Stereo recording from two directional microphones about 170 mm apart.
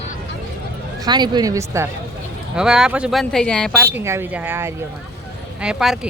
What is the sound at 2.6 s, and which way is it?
Speech, 5° right (ahead or behind).